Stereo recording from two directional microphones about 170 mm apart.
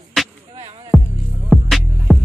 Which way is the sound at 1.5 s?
Centre (ahead or behind).